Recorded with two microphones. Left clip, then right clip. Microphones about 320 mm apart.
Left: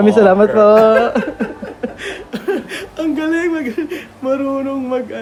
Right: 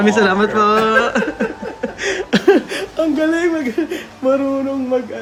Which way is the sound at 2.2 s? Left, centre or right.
Right.